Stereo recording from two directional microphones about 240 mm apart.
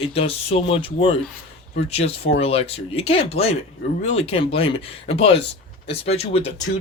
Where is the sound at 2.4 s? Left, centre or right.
Left.